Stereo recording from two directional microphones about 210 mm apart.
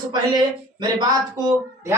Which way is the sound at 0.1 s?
20° right (ahead or behind).